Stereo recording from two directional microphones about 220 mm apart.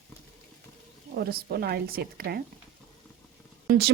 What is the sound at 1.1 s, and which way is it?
A woman's voice, 45° right (ahead or behind).